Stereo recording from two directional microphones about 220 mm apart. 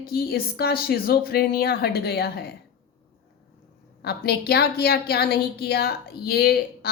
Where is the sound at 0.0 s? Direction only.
45° left (ahead or behind).